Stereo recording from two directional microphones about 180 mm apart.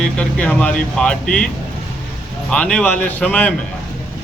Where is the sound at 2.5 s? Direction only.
5° left (ahead or behind).